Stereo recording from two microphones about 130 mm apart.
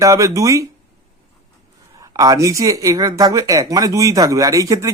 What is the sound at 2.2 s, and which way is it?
Speech, 25° right (ahead or behind).